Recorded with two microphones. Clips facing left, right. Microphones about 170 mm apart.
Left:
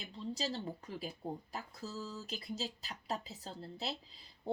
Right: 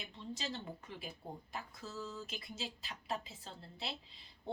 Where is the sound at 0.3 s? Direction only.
35° left (ahead or behind).